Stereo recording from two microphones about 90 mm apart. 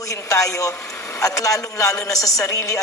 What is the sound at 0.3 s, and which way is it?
A woman's voice, 40° left (ahead or behind).